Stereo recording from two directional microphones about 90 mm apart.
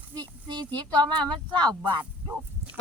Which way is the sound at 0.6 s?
15° left (ahead or behind).